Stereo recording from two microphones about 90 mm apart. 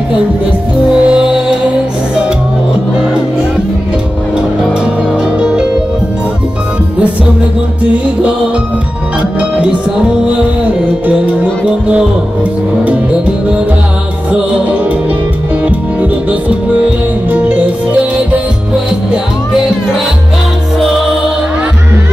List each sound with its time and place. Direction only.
1.0 s music: 10° right (ahead or behind)
5.4 s music: 10° right (ahead or behind)
15.6 s music: 15° right (ahead or behind)